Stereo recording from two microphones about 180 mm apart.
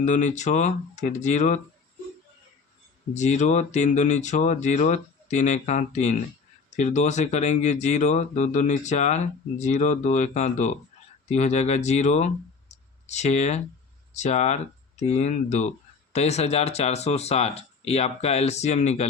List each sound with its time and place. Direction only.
0.0 s speech: 40° left (ahead or behind)
3.2 s speech: 40° left (ahead or behind)